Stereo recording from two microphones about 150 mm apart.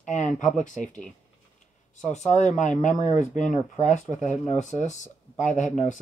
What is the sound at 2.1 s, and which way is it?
Speech, 50° left (ahead or behind).